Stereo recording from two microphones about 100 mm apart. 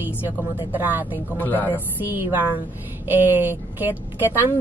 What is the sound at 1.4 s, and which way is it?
Speech, 15° left (ahead or behind).